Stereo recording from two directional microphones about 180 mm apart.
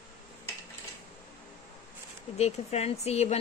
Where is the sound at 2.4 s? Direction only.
35° left (ahead or behind).